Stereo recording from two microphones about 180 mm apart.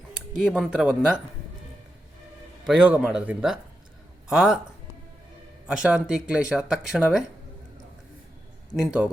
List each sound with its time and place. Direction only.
0.4 s speech: 5° right (ahead or behind)
2.6 s speech: 5° right (ahead or behind)
5.6 s speech: 5° right (ahead or behind)
8.7 s speech: 5° right (ahead or behind)